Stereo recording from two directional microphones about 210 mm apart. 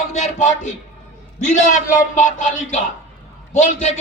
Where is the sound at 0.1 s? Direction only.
35° left (ahead or behind).